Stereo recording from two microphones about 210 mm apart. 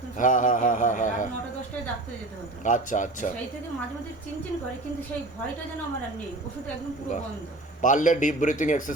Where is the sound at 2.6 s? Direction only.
35° left (ahead or behind).